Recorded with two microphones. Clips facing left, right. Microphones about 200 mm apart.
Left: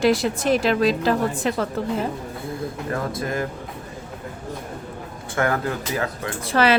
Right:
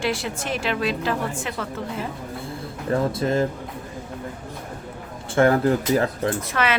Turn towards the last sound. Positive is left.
turn(degrees=35)  # may be behind; listen again after turning